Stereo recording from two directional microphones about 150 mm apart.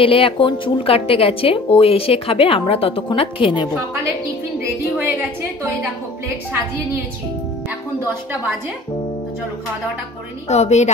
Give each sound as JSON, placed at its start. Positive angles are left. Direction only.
{"t": 0.0, "sound": "speech", "side_deg": 35}
{"t": 10.5, "sound": "a woman's voice", "side_deg": 50}